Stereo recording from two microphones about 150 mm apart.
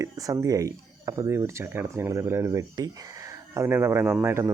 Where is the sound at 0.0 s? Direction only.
20° right (ahead or behind).